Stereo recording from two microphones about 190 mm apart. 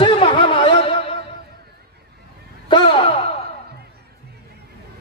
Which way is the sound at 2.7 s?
25° left (ahead or behind).